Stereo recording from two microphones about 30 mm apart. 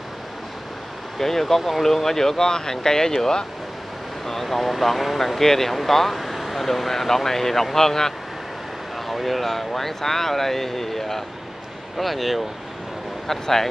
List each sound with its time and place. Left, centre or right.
1.1 s speech: centre
4.3 s speech: centre
5.4 s speech: centre
8.9 s speech: centre
13.3 s speech: centre